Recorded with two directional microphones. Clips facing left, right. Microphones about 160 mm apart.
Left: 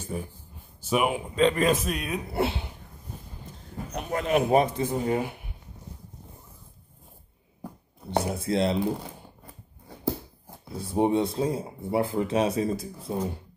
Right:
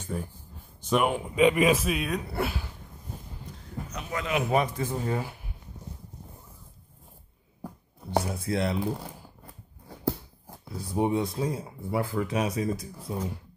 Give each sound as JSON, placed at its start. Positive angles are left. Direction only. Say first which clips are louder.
{"t": 0.0, "sound": "speech", "louder": "even", "side_deg": 10}
{"t": 1.3, "sound": "a man's voice", "louder": "right 1 dB", "side_deg": -10}
{"t": 2.3, "sound": "speech", "louder": "left 4 dB", "side_deg": 25}
{"t": 3.9, "sound": "speech", "louder": "left 5 dB", "side_deg": 50}
{"t": 4.5, "sound": "speech", "louder": "left 2 dB", "side_deg": 30}
{"t": 4.8, "sound": "speech", "louder": "left 4 dB", "side_deg": 20}
{"t": 8.2, "sound": "speech", "louder": "left 3 dB", "side_deg": 25}
{"t": 10.7, "sound": "speech", "louder": "left 3 dB", "side_deg": 25}